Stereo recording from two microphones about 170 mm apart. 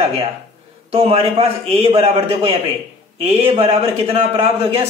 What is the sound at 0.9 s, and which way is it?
A man's voice, 35° right (ahead or behind).